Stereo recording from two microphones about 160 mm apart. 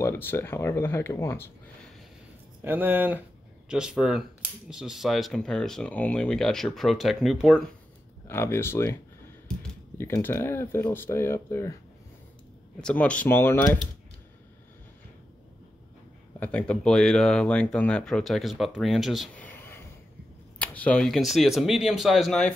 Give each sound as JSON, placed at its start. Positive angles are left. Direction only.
{"t": 0.0, "sound": "speech", "side_deg": 15}
{"t": 2.6, "sound": "speech", "side_deg": -15}
{"t": 8.3, "sound": "speech", "side_deg": 15}
{"t": 9.9, "sound": "speech", "side_deg": 15}
{"t": 12.8, "sound": "speech", "side_deg": 10}
{"t": 16.3, "sound": "speech", "side_deg": 5}
{"t": 19.4, "sound": "a sound", "side_deg": 15}
{"t": 20.5, "sound": "speech", "side_deg": 10}